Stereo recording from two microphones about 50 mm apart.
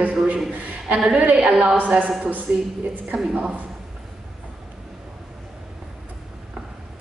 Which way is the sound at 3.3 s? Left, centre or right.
Right.